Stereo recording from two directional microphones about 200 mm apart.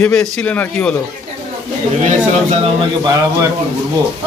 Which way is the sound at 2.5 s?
25° right (ahead or behind).